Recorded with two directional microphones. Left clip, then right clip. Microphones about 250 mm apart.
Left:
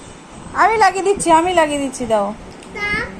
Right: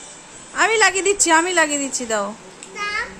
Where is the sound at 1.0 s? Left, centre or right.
Centre.